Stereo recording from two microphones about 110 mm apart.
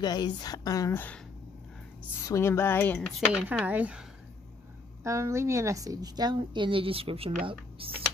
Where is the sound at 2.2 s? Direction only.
25° left (ahead or behind).